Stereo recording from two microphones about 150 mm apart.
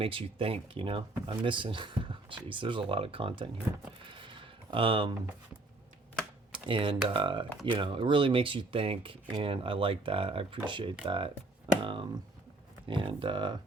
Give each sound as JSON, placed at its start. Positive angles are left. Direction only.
{"t": 0.0, "sound": "speech", "side_deg": -40}
{"t": 4.0, "sound": "a sound", "side_deg": -35}
{"t": 6.5, "sound": "speech", "side_deg": -35}